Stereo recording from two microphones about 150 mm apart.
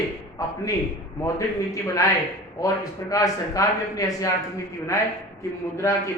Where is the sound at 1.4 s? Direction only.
20° left (ahead or behind).